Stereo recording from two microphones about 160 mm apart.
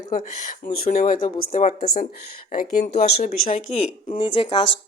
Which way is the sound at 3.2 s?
55° left (ahead or behind).